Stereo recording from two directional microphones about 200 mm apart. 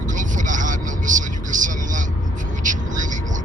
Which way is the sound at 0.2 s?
40° right (ahead or behind).